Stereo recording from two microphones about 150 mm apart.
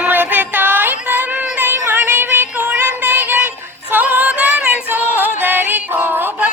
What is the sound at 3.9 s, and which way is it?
Music, 10° right (ahead or behind).